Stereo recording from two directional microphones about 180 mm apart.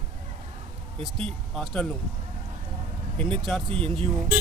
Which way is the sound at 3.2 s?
5° left (ahead or behind).